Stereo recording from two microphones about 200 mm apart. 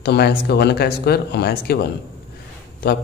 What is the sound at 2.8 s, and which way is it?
Speech, 50° left (ahead or behind).